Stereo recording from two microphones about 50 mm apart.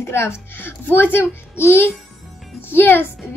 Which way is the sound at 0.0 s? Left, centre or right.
Left.